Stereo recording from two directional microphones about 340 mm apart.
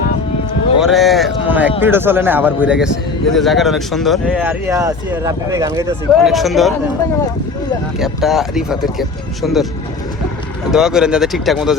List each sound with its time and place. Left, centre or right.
0.8 s a sound: centre
1.8 s speech: centre
7.9 s speech: centre
10.7 s speech: centre